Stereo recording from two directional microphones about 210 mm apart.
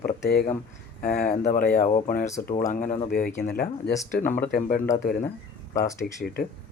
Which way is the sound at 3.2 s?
5° left (ahead or behind).